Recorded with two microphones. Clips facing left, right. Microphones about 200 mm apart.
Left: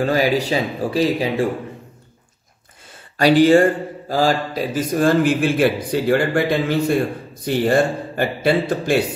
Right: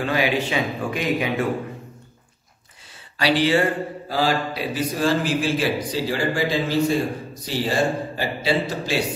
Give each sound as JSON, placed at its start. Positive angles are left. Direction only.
{"t": 0.0, "sound": "speech", "side_deg": 40}
{"t": 3.2, "sound": "speech", "side_deg": 45}